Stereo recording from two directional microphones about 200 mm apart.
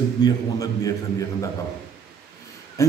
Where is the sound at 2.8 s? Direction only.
15° left (ahead or behind).